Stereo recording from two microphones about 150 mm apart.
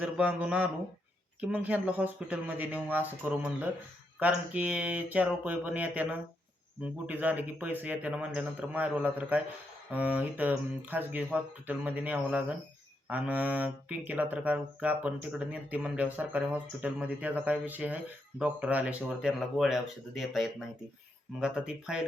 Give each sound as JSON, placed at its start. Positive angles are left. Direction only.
{"t": 0.0, "sound": "speech", "side_deg": -10}